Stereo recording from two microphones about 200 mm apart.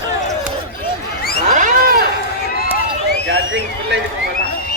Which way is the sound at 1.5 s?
40° right (ahead or behind).